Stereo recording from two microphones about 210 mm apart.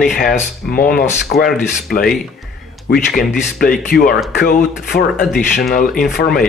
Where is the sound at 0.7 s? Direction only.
45° left (ahead or behind).